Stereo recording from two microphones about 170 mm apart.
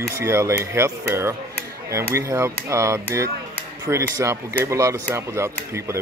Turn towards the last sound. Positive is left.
turn(degrees=-15)  # may be behind; listen again after turning